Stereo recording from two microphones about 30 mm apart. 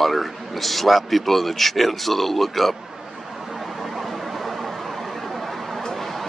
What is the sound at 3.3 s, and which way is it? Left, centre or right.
Vehicle, centre.